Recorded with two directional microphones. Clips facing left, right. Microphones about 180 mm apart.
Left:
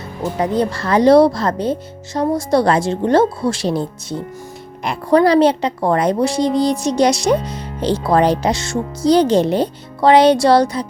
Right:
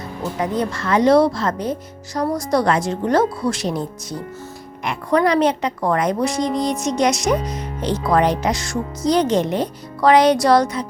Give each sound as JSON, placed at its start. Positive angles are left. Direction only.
{"t": 0.3, "sound": "a woman's voice", "side_deg": 30}